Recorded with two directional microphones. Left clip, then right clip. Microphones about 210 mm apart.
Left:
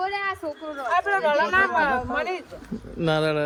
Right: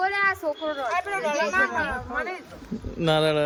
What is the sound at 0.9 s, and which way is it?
Speech, 30° left (ahead or behind).